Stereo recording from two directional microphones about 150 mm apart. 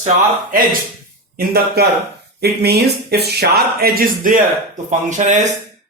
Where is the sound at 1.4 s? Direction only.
90° right; by 4.4 s 70° right (ahead or behind).